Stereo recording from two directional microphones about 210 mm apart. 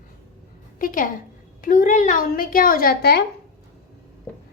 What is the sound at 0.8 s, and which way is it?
A woman's voice, 40° left (ahead or behind).